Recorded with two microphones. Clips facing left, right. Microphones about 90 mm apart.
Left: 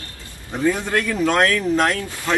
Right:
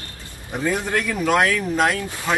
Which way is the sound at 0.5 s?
10° right (ahead or behind).